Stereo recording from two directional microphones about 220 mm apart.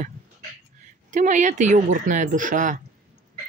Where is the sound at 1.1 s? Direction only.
35° right (ahead or behind).